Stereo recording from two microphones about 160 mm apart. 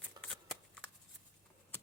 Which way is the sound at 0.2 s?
20° right (ahead or behind).